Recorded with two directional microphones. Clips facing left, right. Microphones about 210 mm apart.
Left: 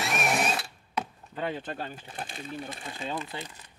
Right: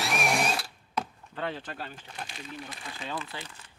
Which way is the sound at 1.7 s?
45° left (ahead or behind).